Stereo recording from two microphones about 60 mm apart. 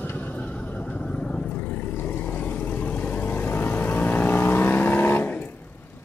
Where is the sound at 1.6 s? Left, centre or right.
Left.